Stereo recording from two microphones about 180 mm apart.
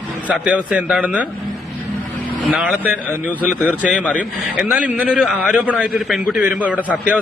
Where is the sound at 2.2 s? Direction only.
5° right (ahead or behind).